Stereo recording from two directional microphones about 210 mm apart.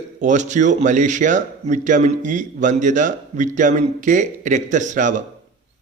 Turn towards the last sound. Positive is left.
turn(degrees=-40)  # may be behind; listen again after turning